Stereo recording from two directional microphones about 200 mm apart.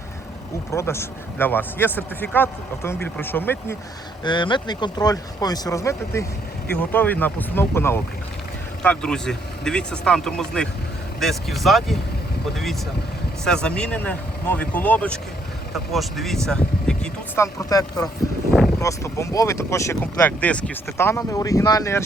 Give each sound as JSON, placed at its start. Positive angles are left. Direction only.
{"t": 0.7, "sound": "speech", "side_deg": 15}
{"t": 4.2, "sound": "speech", "side_deg": 25}
{"t": 13.4, "sound": "speech", "side_deg": 5}